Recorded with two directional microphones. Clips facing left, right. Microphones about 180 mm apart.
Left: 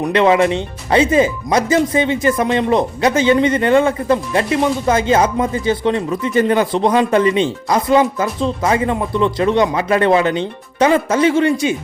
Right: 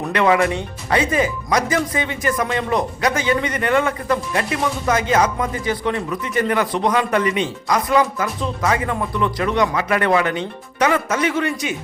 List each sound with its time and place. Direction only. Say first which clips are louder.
0.0 s speech: left 4 dB; 25° left (ahead or behind)